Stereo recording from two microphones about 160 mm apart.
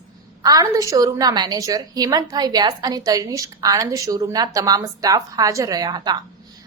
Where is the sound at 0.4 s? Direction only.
20° right (ahead or behind).